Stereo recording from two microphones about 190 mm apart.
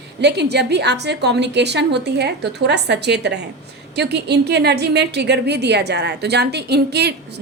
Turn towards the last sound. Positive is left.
turn(degrees=-60)  # may be behind; listen again after turning